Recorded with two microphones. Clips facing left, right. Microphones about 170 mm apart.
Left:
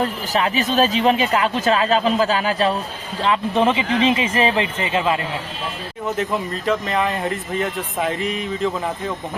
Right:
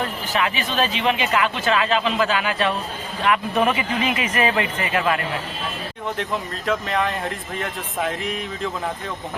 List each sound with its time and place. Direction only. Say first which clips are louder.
0.0 s speech: left 3 dB; 35° left (ahead or behind)
6.7 s speech: left 2 dB; centre (ahead or behind)